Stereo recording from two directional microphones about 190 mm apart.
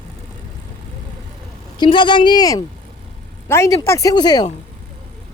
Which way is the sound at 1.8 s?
25° left (ahead or behind).